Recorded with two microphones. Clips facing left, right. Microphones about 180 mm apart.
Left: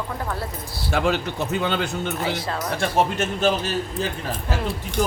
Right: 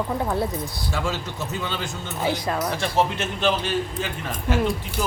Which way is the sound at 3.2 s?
40° left (ahead or behind).